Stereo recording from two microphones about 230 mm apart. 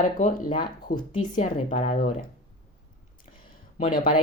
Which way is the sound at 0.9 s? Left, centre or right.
Left.